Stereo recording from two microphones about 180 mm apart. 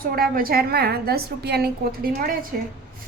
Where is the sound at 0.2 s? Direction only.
55° right (ahead or behind).